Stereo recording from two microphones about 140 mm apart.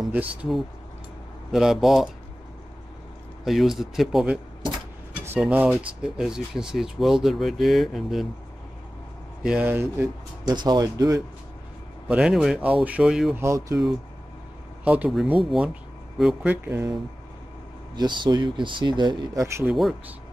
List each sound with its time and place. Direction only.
0.1 s speech: 10° right (ahead or behind)
1.5 s speech: 5° right (ahead or behind)
3.4 s speech: centre (ahead or behind)
5.4 s speech: 10° right (ahead or behind)
9.4 s speech: 5° right (ahead or behind)
10.4 s speech: 30° right (ahead or behind)
12.1 s speech: 5° right (ahead or behind)
13.4 s speech: 20° right (ahead or behind)
14.9 s speech: 5° right (ahead or behind)
16.6 s speech: 15° right (ahead or behind)
17.9 s speech: 30° right (ahead or behind)
19.7 s speech: centre (ahead or behind)